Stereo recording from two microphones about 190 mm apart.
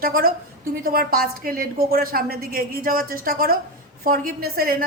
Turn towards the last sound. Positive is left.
turn(degrees=-50)  # may be behind; listen again after turning